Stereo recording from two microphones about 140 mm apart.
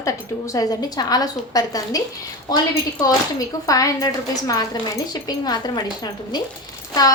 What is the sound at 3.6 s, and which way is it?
A woman's voice, 25° left (ahead or behind).